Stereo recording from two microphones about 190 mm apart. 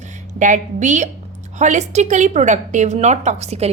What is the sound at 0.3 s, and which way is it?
A woman's voice, 40° right (ahead or behind).